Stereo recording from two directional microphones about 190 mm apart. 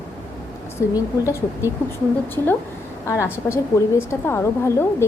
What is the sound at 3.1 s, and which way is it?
A woman's voice, 15° left (ahead or behind).